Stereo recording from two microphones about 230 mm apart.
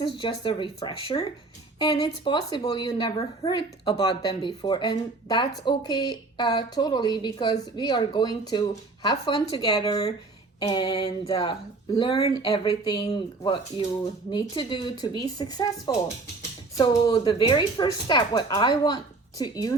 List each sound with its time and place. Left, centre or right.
0.4 s a woman's voice: left